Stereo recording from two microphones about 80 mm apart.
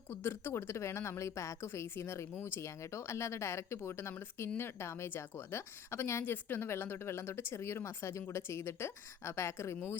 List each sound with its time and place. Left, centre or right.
0.1 s speech: left